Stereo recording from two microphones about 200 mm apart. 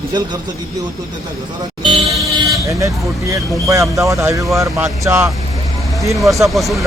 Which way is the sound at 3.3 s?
15° right (ahead or behind).